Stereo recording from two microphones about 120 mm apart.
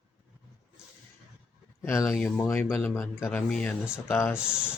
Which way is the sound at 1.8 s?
20° left (ahead or behind).